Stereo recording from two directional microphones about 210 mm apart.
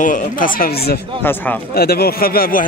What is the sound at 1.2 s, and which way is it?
Speech, 10° left (ahead or behind).